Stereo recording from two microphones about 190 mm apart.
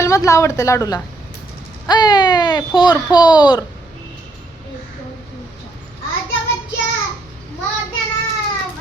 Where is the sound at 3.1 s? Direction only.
5° right (ahead or behind).